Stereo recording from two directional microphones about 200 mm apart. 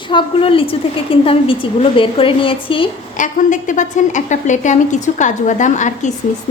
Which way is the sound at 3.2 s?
40° left (ahead or behind).